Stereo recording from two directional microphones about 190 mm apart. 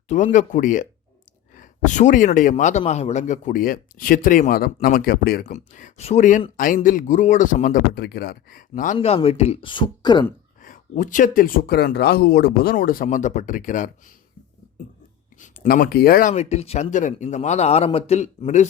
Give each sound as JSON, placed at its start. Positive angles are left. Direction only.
{"t": 0.1, "sound": "a man's voice", "side_deg": 40}
{"t": 5.5, "sound": "a man's voice", "side_deg": 40}
{"t": 9.0, "sound": "speech", "side_deg": 30}
{"t": 10.6, "sound": "a man's voice", "side_deg": 45}
{"t": 15.4, "sound": "speech", "side_deg": 50}
{"t": 16.3, "sound": "a man's voice", "side_deg": 35}